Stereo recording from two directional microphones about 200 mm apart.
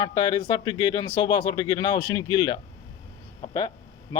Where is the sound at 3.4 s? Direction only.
20° left (ahead or behind).